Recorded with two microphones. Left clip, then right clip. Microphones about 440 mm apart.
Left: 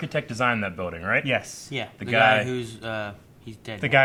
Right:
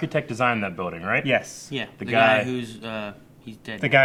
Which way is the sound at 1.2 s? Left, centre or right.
Centre.